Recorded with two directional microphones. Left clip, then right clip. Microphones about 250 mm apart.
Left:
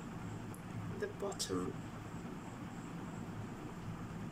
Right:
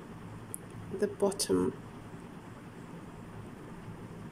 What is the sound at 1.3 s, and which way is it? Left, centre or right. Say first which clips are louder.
Speech: right 9 dB; right.